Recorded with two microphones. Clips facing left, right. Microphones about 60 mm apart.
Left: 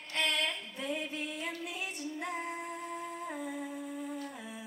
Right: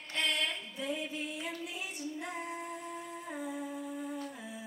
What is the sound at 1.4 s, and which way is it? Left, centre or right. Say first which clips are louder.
Female singing: left 1 dB; left.